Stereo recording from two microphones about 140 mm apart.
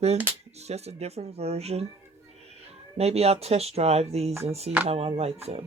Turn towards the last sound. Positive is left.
turn(degrees=-45)  # may be behind; listen again after turning